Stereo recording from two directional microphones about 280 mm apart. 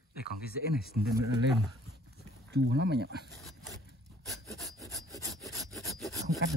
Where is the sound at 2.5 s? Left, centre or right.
Right.